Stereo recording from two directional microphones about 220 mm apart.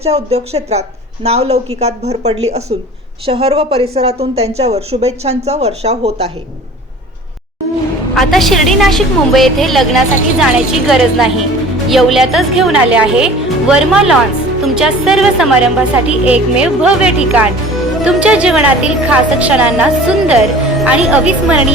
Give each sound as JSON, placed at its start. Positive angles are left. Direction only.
{"t": 0.0, "sound": "a woman's voice", "side_deg": -30}
{"t": 8.1, "sound": "a woman's voice", "side_deg": 0}